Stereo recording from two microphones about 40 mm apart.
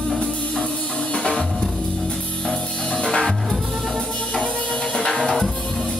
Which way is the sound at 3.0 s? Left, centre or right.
Centre.